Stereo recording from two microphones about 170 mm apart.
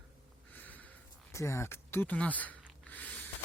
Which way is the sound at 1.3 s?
15° left (ahead or behind).